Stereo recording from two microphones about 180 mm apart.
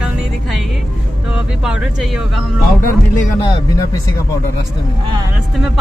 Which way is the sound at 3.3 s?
20° left (ahead or behind).